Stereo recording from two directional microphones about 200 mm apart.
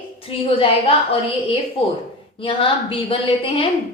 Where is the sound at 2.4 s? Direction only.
25° left (ahead or behind).